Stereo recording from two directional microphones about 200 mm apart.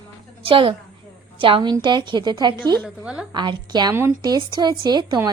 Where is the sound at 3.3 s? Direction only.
20° right (ahead or behind).